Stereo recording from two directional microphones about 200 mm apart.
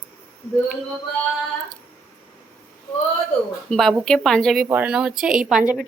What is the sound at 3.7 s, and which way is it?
A woman's voice, centre (ahead or behind).